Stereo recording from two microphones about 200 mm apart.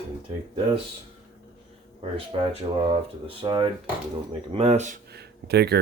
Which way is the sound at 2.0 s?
25° right (ahead or behind).